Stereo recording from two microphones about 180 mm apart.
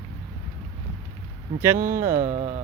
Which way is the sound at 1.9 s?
15° right (ahead or behind).